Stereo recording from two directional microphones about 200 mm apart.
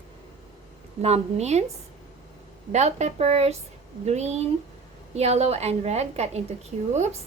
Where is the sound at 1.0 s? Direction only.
30° right (ahead or behind).